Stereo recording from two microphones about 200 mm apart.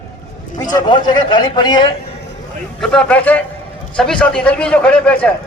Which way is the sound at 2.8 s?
5° left (ahead or behind).